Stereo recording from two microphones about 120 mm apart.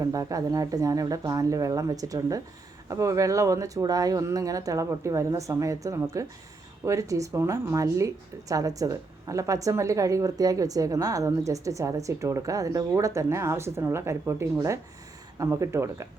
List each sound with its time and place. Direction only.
0.0 s speech: 30° right (ahead or behind)